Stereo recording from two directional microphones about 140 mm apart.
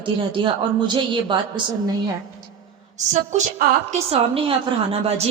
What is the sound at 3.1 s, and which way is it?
A woman's voice, 60° right (ahead or behind).